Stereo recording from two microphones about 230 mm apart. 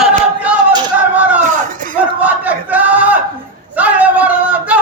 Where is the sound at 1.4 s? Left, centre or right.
Right.